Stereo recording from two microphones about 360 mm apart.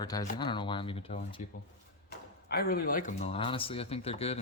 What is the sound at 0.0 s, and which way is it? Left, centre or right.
Speech, centre.